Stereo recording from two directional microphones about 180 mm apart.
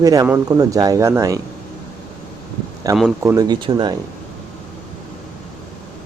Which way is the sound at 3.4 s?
25° right (ahead or behind).